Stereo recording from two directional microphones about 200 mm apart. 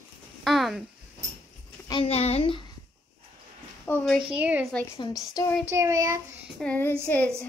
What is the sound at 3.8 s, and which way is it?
Speech, 5° left (ahead or behind).